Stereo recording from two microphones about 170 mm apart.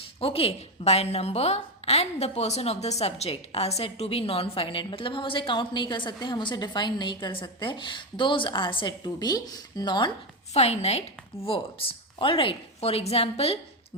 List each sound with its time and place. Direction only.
0.0 s speech: 35° left (ahead or behind)
10.5 s speech: 40° left (ahead or behind)